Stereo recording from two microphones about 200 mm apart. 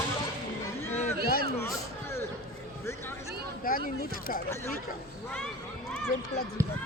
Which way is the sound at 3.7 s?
45° left (ahead or behind).